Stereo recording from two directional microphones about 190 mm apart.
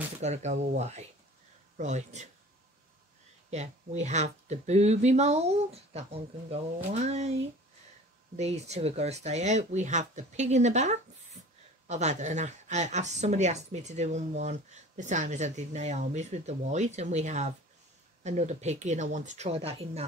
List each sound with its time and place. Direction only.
0.2 s a woman's voice: 35° right (ahead or behind)
3.4 s a woman's voice: 35° right (ahead or behind)
8.4 s a woman's voice: 35° right (ahead or behind)